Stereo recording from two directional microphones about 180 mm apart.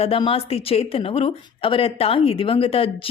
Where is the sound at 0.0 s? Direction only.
30° left (ahead or behind).